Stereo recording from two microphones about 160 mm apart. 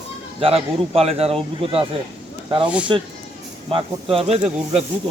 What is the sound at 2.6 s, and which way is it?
Speech, 5° right (ahead or behind).